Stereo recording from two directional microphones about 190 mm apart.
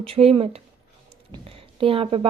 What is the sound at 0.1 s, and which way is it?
A woman's voice, 30° right (ahead or behind).